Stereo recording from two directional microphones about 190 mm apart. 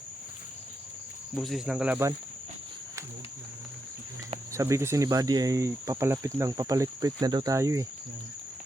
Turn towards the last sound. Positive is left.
turn(degrees=-15)  # may be behind; listen again after turning